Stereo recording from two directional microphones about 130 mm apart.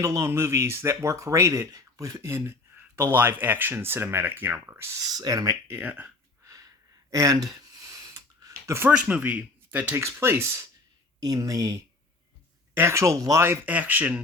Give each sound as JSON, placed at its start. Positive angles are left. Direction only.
{"t": 0.0, "sound": "speech", "side_deg": -25}
{"t": 5.0, "sound": "speech", "side_deg": -30}
{"t": 6.4, "sound": "a sound", "side_deg": -25}
{"t": 8.9, "sound": "speech", "side_deg": -10}